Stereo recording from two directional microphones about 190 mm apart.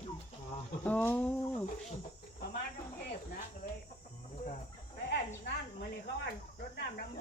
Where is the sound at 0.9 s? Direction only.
10° left (ahead or behind).